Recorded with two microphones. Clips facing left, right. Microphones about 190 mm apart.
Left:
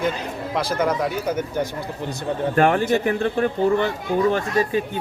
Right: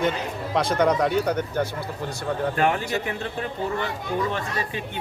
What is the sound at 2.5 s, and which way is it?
Speech, 50° left (ahead or behind).